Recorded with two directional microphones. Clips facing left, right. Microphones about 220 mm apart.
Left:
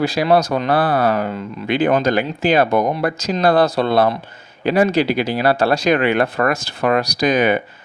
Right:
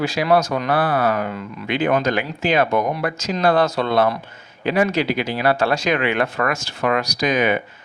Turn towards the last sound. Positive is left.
turn(degrees=35)  # may be behind; listen again after turning